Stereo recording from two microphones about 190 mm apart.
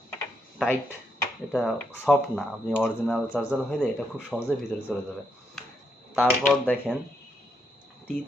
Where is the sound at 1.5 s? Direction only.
5° left (ahead or behind).